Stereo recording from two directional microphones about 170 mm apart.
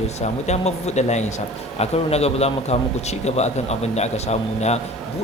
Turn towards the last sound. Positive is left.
turn(degrees=40)  # may be behind; listen again after turning